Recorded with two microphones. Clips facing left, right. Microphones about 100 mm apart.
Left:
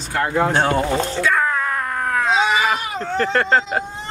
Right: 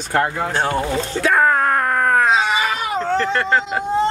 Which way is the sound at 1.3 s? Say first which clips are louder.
Right 5 dB; 55° right (ahead or behind).